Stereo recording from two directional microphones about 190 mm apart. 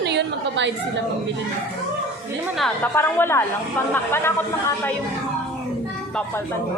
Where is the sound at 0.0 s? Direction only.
65° right (ahead or behind).